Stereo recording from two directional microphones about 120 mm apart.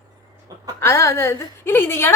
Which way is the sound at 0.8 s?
20° left (ahead or behind).